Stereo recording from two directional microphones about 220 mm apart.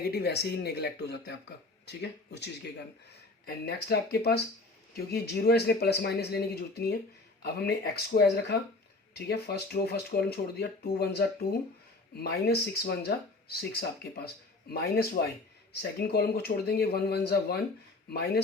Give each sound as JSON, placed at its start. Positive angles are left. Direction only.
{"t": 0.0, "sound": "speech", "side_deg": 45}